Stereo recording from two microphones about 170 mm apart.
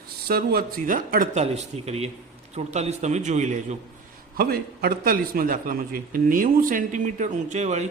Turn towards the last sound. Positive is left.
turn(degrees=-40)  # may be behind; listen again after turning